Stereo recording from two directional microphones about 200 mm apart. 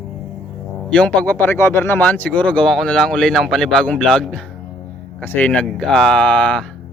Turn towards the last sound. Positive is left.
turn(degrees=5)  # may be behind; listen again after turning